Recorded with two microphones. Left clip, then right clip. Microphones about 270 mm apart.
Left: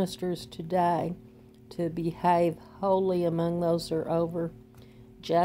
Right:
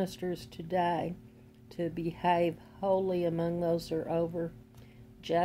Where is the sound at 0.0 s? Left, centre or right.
Centre.